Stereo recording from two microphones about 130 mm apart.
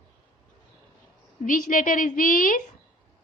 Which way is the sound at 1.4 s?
90° left.